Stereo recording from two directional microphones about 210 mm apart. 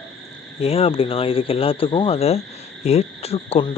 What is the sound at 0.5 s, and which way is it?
Speech, 30° left (ahead or behind).